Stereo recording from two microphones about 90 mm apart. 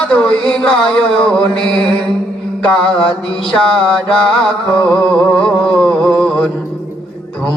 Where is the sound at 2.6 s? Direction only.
15° left (ahead or behind).